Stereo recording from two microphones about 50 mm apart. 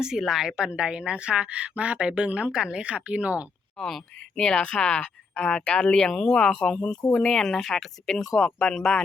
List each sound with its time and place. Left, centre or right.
0.2 s a woman's voice: centre; by 3.4 s right
3.8 s speech: centre
8.4 s speech: centre